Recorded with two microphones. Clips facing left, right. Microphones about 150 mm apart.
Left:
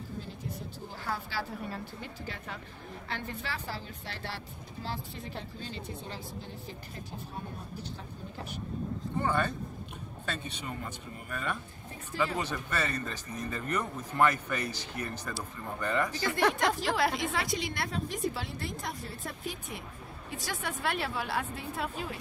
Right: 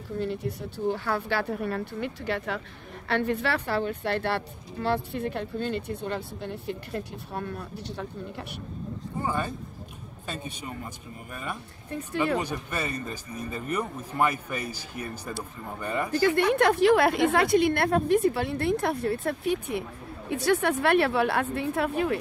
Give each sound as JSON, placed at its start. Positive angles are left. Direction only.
{"t": 0.2, "sound": "speech", "side_deg": -70}
{"t": 9.2, "sound": "a man's voice", "side_deg": -10}
{"t": 11.9, "sound": "speech", "side_deg": -65}
{"t": 12.4, "sound": "speech", "side_deg": -10}
{"t": 16.1, "sound": "speech", "side_deg": -60}